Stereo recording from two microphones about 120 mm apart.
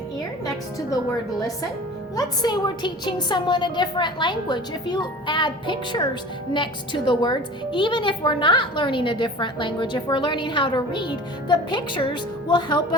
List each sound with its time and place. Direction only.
2.1 s a woman's voice: 35° left (ahead or behind)